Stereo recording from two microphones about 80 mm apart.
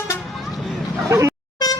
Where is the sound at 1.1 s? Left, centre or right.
Right.